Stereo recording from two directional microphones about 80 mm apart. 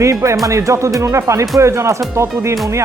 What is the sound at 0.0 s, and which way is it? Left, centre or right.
Speech, right.